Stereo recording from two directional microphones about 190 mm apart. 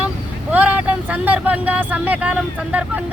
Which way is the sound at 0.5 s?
10° right (ahead or behind).